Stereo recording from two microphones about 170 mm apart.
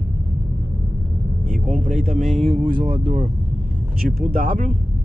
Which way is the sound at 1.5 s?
50° right (ahead or behind).